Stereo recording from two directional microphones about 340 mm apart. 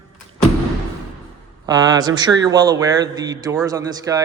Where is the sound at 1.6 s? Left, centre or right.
Centre.